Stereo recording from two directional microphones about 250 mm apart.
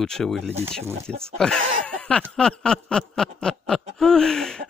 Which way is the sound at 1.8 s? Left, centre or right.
Centre.